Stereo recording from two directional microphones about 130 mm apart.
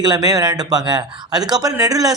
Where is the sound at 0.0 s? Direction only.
30° right (ahead or behind).